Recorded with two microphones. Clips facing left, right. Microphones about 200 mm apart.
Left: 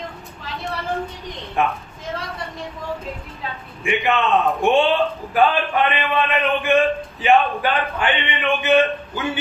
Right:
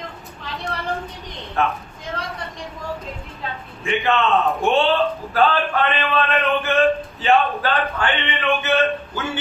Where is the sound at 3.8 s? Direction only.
15° left (ahead or behind).